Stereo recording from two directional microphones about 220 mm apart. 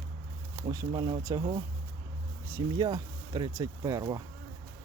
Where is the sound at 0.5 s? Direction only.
15° right (ahead or behind).